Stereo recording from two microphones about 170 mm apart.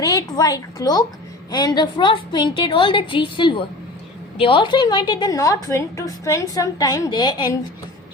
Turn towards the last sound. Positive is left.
turn(degrees=25)  # may be behind; listen again after turning